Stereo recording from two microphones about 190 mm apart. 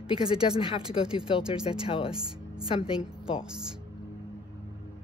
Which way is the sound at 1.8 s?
25° left (ahead or behind).